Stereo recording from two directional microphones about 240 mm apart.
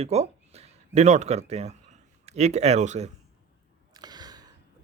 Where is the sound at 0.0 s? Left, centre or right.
Right.